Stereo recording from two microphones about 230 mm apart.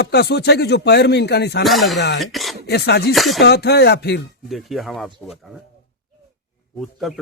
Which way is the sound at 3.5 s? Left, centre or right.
Left.